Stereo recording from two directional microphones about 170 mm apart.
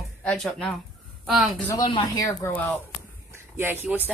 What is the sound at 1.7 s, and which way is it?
Speech, 20° left (ahead or behind).